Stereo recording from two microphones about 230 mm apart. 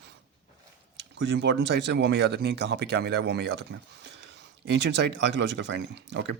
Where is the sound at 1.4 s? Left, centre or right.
Right.